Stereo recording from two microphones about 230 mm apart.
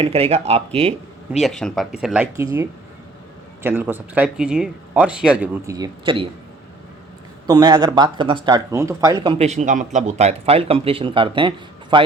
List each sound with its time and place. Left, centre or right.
0.0 s speech: right
1.4 s speech: centre
3.6 s speech: centre
7.4 s speech: centre